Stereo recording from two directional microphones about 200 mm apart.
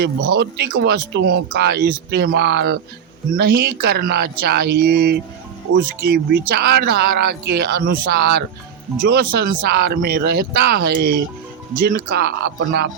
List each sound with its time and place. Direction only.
0.0 s speech: 55° right (ahead or behind)